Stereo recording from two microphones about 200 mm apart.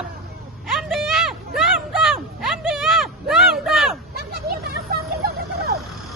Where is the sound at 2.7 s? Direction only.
Centre (ahead or behind).